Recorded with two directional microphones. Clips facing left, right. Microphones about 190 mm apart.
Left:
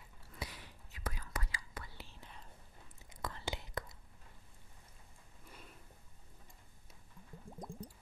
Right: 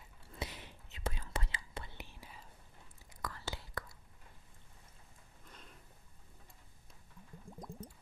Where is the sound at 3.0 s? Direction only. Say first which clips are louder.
Left 1 dB; 20° left (ahead or behind).